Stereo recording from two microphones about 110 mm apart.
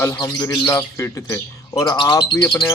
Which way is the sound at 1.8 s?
40° left (ahead or behind).